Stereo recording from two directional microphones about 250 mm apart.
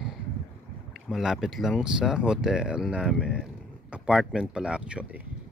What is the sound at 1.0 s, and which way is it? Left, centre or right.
Speech, centre.